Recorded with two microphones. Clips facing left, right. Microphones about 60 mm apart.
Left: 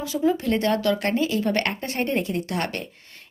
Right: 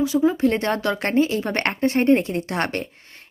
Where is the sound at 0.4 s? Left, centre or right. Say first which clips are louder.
Right 1 dB; right.